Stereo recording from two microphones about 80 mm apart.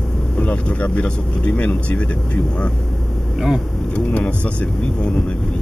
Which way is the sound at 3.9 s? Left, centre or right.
Centre.